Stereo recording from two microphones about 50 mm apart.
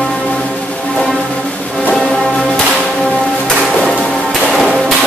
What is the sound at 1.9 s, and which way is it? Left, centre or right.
Music, centre.